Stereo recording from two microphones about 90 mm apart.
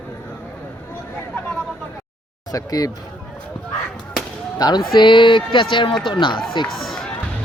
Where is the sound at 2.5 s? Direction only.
45° left (ahead or behind).